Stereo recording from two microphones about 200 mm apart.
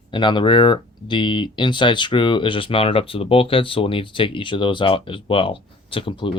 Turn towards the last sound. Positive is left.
turn(degrees=25)  # may be behind; listen again after turning